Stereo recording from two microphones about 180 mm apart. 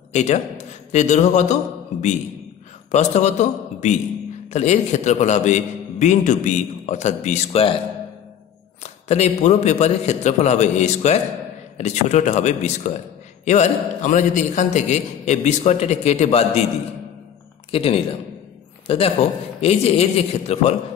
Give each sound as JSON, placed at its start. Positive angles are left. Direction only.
{"t": 0.1, "sound": "a man's voice", "side_deg": 40}
{"t": 8.8, "sound": "a man's voice", "side_deg": 35}
{"t": 17.6, "sound": "a man's voice", "side_deg": 30}